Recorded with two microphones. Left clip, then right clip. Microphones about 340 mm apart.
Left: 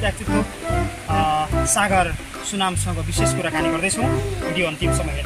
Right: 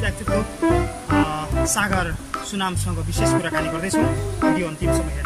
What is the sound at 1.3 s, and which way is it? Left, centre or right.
Music, centre.